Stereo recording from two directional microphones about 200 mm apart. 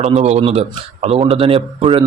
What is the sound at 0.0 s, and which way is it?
Speech, 35° right (ahead or behind).